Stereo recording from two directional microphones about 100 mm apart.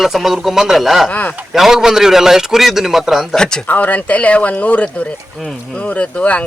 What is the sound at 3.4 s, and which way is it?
Speech, 10° left (ahead or behind).